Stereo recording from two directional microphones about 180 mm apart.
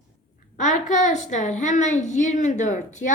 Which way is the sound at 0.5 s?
45° left (ahead or behind).